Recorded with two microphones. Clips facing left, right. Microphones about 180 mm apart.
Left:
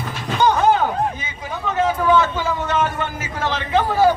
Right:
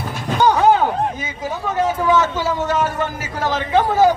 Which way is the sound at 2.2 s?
40° right (ahead or behind).